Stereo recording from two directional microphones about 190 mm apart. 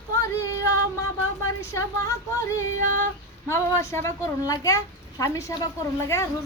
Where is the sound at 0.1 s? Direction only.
15° left (ahead or behind).